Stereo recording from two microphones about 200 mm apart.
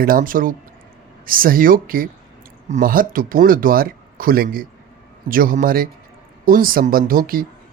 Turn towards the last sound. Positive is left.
turn(degrees=-45)  # may be behind; listen again after turning